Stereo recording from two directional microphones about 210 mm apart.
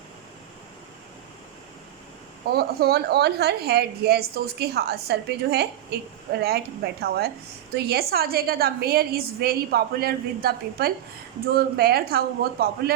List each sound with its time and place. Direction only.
2.5 s a woman's voice: 50° right (ahead or behind)